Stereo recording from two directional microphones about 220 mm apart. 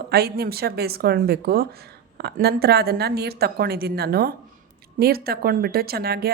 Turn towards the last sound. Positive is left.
turn(degrees=-45)  # may be behind; listen again after turning